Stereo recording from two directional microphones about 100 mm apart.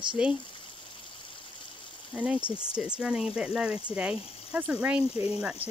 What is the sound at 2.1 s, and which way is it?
Speech, 10° right (ahead or behind).